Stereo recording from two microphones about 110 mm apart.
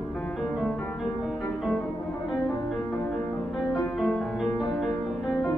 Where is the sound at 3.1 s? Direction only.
Centre (ahead or behind).